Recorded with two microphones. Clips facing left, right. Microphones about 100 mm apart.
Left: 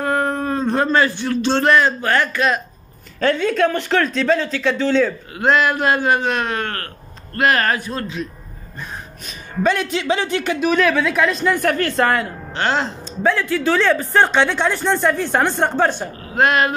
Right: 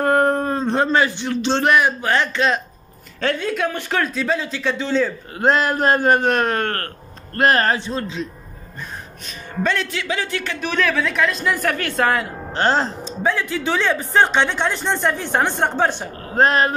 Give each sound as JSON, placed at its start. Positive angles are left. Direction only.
{"t": 0.0, "sound": "a sound", "side_deg": -50}
{"t": 0.4, "sound": "a man's voice", "side_deg": -30}
{"t": 3.4, "sound": "a man's voice", "side_deg": -10}
{"t": 5.3, "sound": "speech", "side_deg": -35}
{"t": 7.3, "sound": "a man's voice", "side_deg": -35}
{"t": 9.6, "sound": "speech", "side_deg": 15}
{"t": 10.6, "sound": "a man's voice", "side_deg": 5}
{"t": 12.5, "sound": "speech", "side_deg": -40}
{"t": 13.2, "sound": "a man's voice", "side_deg": -15}
{"t": 16.2, "sound": "speech", "side_deg": -35}